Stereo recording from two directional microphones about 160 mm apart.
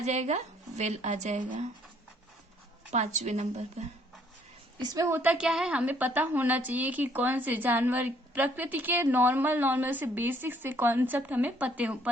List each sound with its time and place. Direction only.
0.0 s speech: 45° right (ahead or behind)
2.9 s speech: 45° right (ahead or behind)
4.8 s a woman's voice: 20° right (ahead or behind)